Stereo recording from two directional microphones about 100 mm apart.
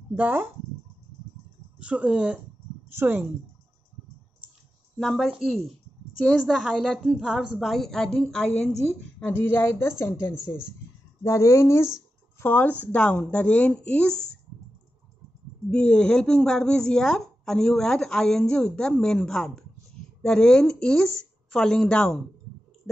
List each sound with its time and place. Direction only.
0.1 s speech: 15° right (ahead or behind)
1.8 s speech: 10° right (ahead or behind)
2.9 s speech: 20° right (ahead or behind)
4.9 s a woman's voice: centre (ahead or behind)
9.2 s speech: 25° left (ahead or behind)
15.7 s speech: 10° left (ahead or behind)